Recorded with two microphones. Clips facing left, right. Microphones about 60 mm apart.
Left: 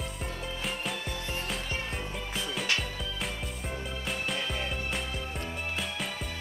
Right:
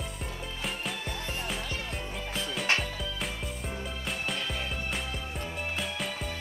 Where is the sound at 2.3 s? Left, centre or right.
Centre.